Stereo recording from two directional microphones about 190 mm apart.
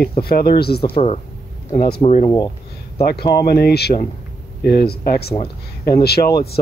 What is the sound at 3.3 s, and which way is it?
Speech, 55° left (ahead or behind).